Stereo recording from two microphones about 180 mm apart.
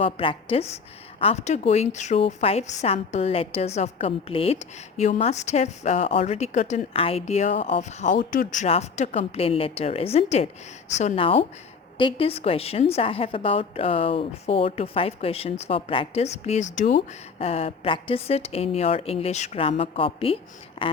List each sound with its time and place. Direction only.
0.0 s speech: 30° left (ahead or behind)